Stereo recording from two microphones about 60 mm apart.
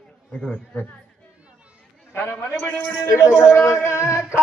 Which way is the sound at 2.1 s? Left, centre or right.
Left.